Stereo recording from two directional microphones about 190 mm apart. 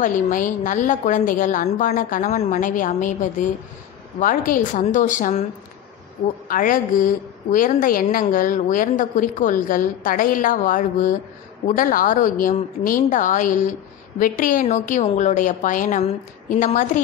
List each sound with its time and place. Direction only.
0.0 s speech: 45° left (ahead or behind)
4.5 s speech: 45° left (ahead or behind)
6.4 s speech: 45° left (ahead or behind)